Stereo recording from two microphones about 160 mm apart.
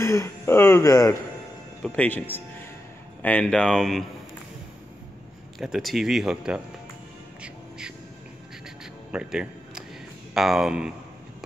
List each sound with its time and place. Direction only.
0.0 s speech: 15° left (ahead or behind)
5.6 s speech: centre (ahead or behind)
9.1 s music: 5° right (ahead or behind)
10.3 s speech: centre (ahead or behind)